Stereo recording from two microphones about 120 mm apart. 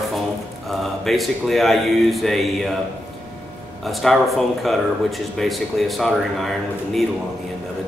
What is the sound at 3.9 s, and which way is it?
Speech, centre (ahead or behind).